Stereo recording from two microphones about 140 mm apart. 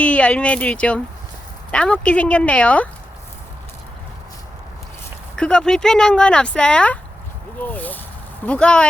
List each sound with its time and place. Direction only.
0.0 s speech: 10° left (ahead or behind)
5.4 s speech: 5° left (ahead or behind)